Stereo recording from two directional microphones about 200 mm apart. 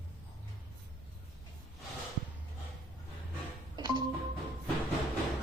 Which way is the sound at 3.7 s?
20° right (ahead or behind).